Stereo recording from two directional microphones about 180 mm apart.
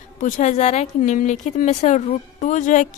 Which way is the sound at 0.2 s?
40° left (ahead or behind).